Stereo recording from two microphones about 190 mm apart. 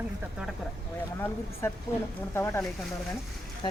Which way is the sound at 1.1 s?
15° left (ahead or behind).